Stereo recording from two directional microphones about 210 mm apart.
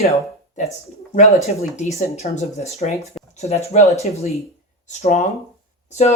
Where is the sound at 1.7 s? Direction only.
35° left (ahead or behind).